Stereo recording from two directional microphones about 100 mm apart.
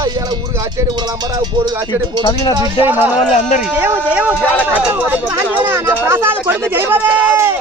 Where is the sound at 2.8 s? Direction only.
20° right (ahead or behind).